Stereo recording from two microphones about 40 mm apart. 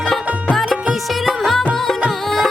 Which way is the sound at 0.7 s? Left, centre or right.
Centre.